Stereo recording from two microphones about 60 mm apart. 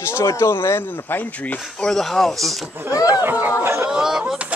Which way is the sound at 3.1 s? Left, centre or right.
Right.